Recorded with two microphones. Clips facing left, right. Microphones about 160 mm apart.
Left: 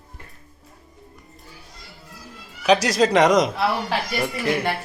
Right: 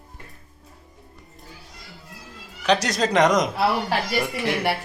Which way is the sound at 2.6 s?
5° left (ahead or behind).